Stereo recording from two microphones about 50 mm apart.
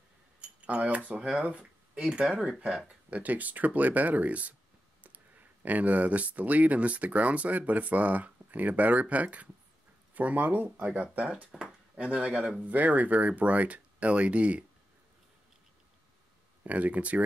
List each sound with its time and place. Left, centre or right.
0.4 s speech: right
3.1 s speech: right
12.4 s speech: centre
12.6 s speech: right
16.6 s speech: right